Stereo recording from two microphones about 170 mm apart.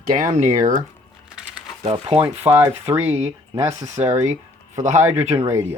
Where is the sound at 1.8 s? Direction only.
35° right (ahead or behind).